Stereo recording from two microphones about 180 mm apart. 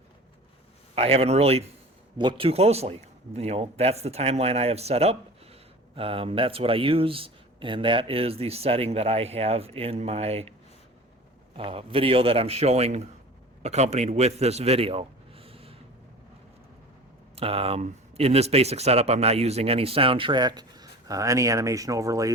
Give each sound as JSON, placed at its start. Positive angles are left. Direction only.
{"t": 0.9, "sound": "speech", "side_deg": -35}
{"t": 11.5, "sound": "a man's voice", "side_deg": -30}
{"t": 17.3, "sound": "speech", "side_deg": -30}